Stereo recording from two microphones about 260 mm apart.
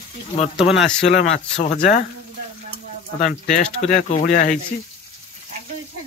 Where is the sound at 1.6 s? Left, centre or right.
Left.